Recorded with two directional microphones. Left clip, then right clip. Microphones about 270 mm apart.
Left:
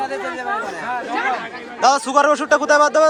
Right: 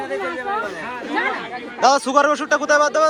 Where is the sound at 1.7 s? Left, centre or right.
Centre.